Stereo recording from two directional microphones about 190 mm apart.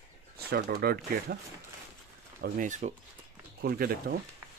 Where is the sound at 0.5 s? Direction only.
55° right (ahead or behind).